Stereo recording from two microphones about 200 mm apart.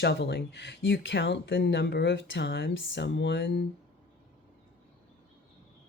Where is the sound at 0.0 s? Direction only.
60° left (ahead or behind).